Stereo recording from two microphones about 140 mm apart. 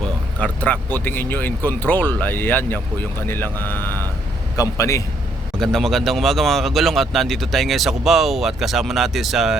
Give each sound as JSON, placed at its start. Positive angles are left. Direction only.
{"t": 0.3, "sound": "a man's voice", "side_deg": 10}
{"t": 5.5, "sound": "a man's voice", "side_deg": 0}